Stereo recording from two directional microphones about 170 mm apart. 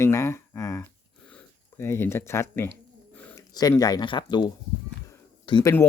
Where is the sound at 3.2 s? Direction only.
10° left (ahead or behind).